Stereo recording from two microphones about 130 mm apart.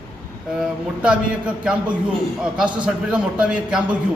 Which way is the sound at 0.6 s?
10° right (ahead or behind).